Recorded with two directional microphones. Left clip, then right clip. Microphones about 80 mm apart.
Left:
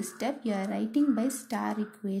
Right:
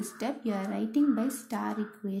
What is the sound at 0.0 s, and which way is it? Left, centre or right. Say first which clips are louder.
A woman's voice: left 1 dB; left.